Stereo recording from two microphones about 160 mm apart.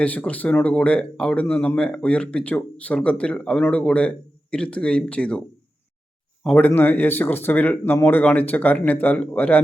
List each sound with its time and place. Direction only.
0.0 s speech: 10° left (ahead or behind)
6.4 s speech: 10° left (ahead or behind)